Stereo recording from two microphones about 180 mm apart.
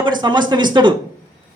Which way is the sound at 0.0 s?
25° right (ahead or behind).